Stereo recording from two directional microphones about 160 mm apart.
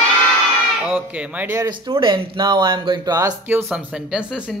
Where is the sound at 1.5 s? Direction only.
25° right (ahead or behind).